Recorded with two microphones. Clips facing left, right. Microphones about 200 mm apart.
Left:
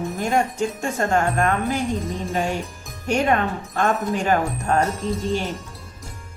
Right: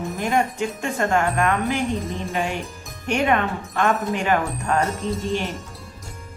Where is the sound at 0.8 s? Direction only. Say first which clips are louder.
Right 1 dB; 40° left (ahead or behind).